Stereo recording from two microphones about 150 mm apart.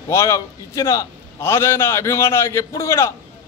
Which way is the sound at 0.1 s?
20° left (ahead or behind).